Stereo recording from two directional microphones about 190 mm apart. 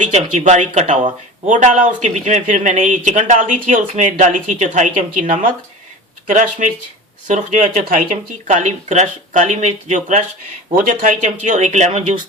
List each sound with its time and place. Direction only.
0.0 s speech: 40° right (ahead or behind)